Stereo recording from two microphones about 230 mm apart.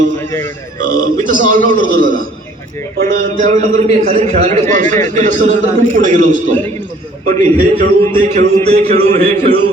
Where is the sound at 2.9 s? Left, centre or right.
Right.